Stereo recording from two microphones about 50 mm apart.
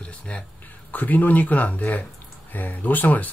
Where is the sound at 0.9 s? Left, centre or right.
Left.